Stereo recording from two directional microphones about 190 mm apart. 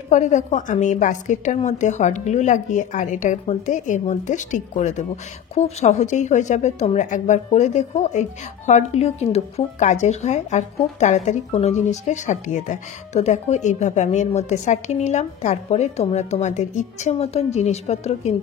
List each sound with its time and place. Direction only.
0.1 s speech: 40° left (ahead or behind)